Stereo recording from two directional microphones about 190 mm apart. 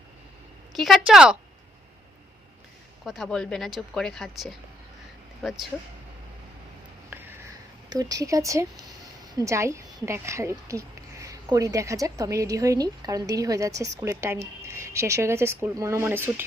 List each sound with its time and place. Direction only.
0.8 s speech: centre (ahead or behind)
3.0 s speech: centre (ahead or behind)
7.1 s a sound: 10° right (ahead or behind)
7.9 s a woman's voice: 20° right (ahead or behind)